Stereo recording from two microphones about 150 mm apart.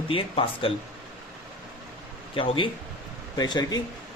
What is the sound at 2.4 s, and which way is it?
Speech, 35° left (ahead or behind).